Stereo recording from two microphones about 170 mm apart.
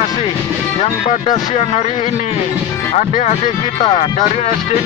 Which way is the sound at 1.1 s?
45° left (ahead or behind).